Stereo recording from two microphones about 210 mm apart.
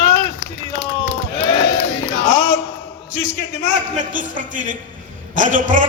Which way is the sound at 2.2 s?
35° right (ahead or behind).